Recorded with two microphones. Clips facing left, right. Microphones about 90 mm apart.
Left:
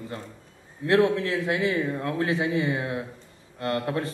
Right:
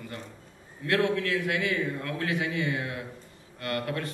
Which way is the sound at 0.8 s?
25° left (ahead or behind).